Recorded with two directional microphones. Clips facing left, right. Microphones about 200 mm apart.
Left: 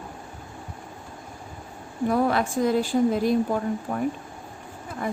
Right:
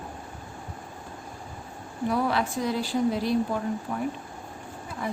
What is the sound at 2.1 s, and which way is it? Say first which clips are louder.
Speech: left 3 dB; 50° left (ahead or behind).